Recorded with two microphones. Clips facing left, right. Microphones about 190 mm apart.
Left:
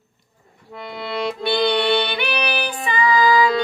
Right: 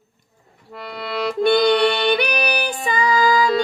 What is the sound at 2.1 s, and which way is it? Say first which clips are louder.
Music: right 3 dB; 40° right (ahead or behind).